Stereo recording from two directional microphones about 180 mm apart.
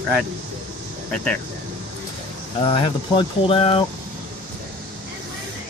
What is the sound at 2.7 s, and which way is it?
Speech, 30° left (ahead or behind).